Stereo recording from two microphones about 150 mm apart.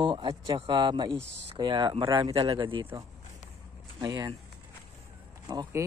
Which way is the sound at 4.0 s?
25° right (ahead or behind).